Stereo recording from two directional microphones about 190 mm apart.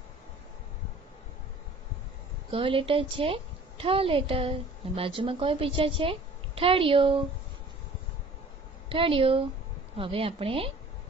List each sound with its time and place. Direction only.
2.5 s a woman's voice: 30° right (ahead or behind)
8.8 s a woman's voice: 30° right (ahead or behind)